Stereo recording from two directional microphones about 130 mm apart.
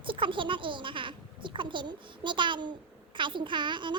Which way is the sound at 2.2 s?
35° right (ahead or behind).